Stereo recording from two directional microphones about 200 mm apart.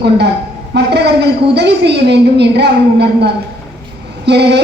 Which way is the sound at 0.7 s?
55° right (ahead or behind).